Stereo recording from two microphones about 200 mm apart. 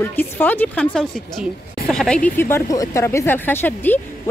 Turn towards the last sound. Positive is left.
turn(degrees=10)  # may be behind; listen again after turning